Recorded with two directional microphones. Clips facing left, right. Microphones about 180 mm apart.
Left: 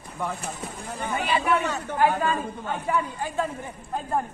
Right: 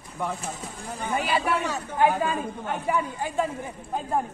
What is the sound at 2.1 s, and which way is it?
Speech, 15° right (ahead or behind).